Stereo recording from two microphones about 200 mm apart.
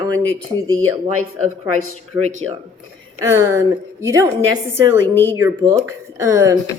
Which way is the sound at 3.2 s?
15° right (ahead or behind).